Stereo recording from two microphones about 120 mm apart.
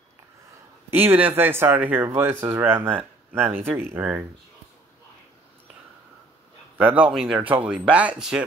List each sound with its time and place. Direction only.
0.8 s speech: 20° right (ahead or behind)
6.8 s speech: 15° right (ahead or behind)
7.1 s speech: 5° right (ahead or behind)